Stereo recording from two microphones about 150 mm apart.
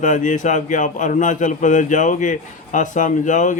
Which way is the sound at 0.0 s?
55° left (ahead or behind).